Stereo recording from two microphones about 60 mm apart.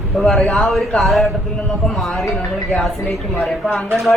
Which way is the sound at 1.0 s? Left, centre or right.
Centre.